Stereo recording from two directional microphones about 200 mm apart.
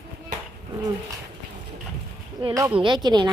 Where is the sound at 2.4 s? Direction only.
25° right (ahead or behind).